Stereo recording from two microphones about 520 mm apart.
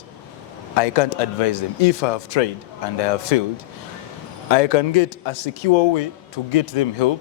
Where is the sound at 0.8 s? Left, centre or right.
Left.